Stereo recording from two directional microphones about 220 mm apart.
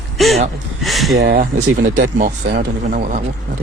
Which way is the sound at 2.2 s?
35° right (ahead or behind).